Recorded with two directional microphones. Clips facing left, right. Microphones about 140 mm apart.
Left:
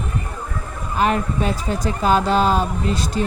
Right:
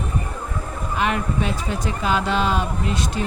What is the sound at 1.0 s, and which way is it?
Speech, 40° left (ahead or behind).